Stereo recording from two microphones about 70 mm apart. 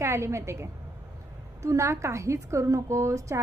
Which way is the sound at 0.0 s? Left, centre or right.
Right.